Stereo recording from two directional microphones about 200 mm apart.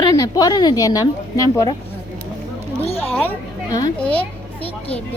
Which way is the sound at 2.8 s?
30° left (ahead or behind).